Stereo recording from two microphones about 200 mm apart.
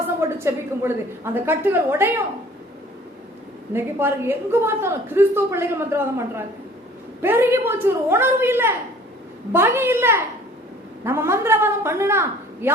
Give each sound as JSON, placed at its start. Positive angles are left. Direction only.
{"t": 0.2, "sound": "a woman's voice", "side_deg": -10}
{"t": 3.7, "sound": "a woman's voice", "side_deg": -10}